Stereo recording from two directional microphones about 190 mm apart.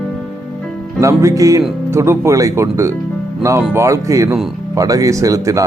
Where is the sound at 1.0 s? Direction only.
15° right (ahead or behind).